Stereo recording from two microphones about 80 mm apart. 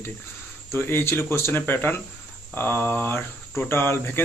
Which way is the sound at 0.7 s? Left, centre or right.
Left.